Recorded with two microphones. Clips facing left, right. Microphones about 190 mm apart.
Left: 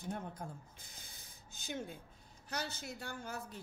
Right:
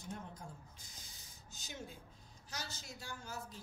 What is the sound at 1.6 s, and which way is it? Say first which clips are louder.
A woman's voice: left 7 dB; 55° left (ahead or behind).